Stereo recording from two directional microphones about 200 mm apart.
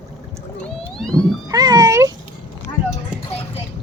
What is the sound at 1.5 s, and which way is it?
Cat, 20° right (ahead or behind).